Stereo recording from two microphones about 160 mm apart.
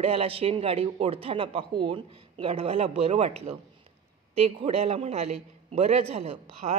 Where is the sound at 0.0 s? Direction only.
40° right (ahead or behind).